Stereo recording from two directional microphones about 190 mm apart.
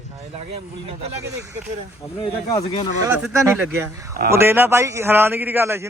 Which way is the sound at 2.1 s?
30° left (ahead or behind).